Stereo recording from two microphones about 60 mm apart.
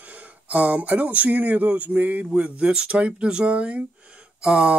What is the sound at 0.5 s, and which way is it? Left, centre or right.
Speech, right.